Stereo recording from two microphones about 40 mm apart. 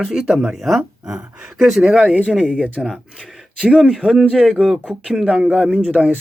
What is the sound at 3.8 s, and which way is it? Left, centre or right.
Speech, centre.